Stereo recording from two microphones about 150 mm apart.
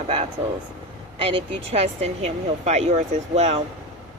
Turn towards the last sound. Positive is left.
turn(degrees=-45)  # may be behind; listen again after turning